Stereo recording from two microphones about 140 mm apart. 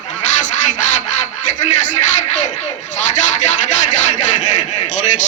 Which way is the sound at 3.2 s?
60° left (ahead or behind).